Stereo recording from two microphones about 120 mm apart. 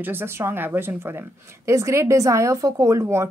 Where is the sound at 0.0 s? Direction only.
20° right (ahead or behind).